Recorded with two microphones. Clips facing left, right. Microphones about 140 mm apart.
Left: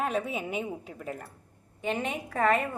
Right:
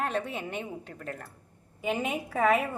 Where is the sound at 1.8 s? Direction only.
5° right (ahead or behind).